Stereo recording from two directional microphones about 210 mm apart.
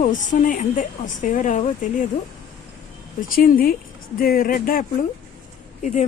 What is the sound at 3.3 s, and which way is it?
Speech, 40° left (ahead or behind).